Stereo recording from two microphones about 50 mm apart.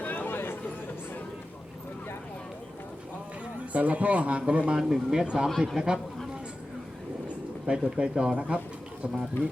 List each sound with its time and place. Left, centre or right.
0.0 s a sound: left
3.7 s a man's voice: right
4.8 s speech: centre
7.7 s a man's voice: centre